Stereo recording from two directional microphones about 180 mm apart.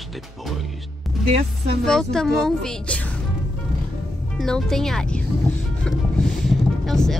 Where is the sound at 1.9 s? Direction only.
5° left (ahead or behind).